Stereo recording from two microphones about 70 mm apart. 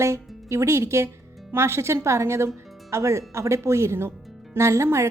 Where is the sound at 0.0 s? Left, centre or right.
Right.